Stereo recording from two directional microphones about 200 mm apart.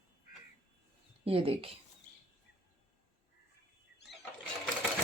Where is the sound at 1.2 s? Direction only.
30° right (ahead or behind).